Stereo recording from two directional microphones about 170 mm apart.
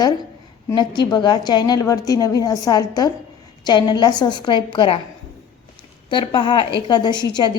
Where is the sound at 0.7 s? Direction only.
25° left (ahead or behind).